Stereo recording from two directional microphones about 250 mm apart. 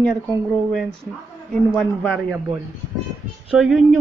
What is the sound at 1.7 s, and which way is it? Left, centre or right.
Speech, centre.